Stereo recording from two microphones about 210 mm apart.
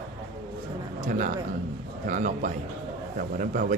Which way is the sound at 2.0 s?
35° right (ahead or behind).